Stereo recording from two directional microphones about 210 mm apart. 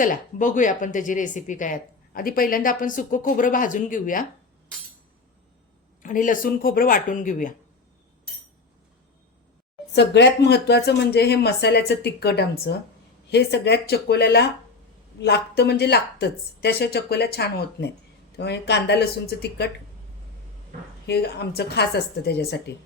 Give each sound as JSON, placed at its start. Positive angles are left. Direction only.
{"t": 0.0, "sound": "speech", "side_deg": 40}
{"t": 6.0, "sound": "speech", "side_deg": 40}
{"t": 9.9, "sound": "speech", "side_deg": 55}
{"t": 21.1, "sound": "speech", "side_deg": 50}